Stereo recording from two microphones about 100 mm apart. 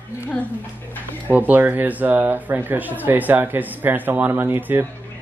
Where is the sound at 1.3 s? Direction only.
15° right (ahead or behind).